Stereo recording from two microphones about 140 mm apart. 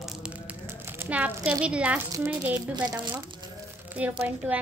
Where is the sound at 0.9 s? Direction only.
10° right (ahead or behind).